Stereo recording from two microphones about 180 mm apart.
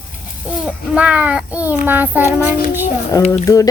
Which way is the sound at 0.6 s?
5° right (ahead or behind).